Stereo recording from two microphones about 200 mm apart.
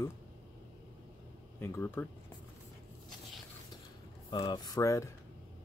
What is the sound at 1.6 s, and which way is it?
Speech, 10° left (ahead or behind).